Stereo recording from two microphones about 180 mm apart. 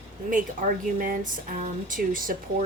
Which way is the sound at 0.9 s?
50° right (ahead or behind).